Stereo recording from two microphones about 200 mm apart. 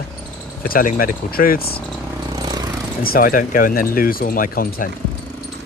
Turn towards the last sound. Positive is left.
turn(degrees=45)  # may be behind; listen again after turning